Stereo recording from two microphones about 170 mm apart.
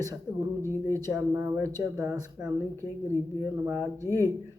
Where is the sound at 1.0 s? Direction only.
20° right (ahead or behind).